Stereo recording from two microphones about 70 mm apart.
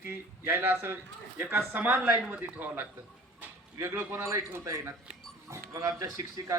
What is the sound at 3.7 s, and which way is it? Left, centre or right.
Speech, right.